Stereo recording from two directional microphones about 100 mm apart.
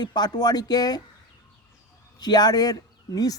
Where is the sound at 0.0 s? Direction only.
45° left (ahead or behind).